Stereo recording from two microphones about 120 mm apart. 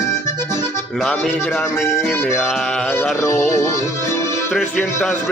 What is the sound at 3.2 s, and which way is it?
Speech, 25° left (ahead or behind).